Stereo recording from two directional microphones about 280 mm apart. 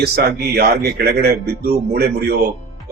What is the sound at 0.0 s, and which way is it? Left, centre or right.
Speech, right.